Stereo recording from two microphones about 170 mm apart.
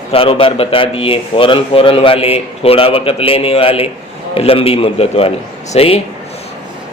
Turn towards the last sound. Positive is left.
turn(degrees=35)  # may be behind; listen again after turning